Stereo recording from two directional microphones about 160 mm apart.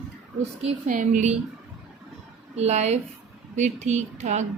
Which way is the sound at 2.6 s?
45° right (ahead or behind).